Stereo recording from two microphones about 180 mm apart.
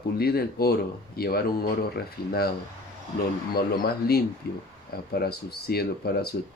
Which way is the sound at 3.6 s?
60° left (ahead or behind).